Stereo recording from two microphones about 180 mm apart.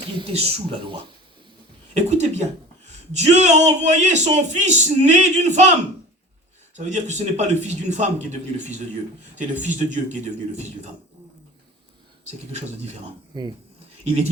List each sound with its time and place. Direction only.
0.2 s a man's voice: 35° right (ahead or behind)
1.9 s a sound: 40° right (ahead or behind)
3.1 s a man's voice: 40° right (ahead or behind)
6.7 s a man's voice: 40° right (ahead or behind)
12.5 s a man's voice: 40° right (ahead or behind)
13.3 s speech: 25° right (ahead or behind)